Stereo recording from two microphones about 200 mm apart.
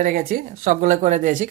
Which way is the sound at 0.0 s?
45° right (ahead or behind).